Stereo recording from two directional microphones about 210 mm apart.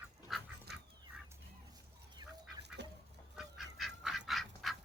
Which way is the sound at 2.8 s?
55° right (ahead or behind).